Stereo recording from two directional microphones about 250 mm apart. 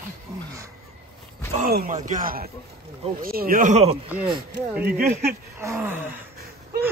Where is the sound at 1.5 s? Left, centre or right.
Right.